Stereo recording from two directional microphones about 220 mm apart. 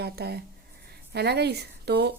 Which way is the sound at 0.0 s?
45° right (ahead or behind).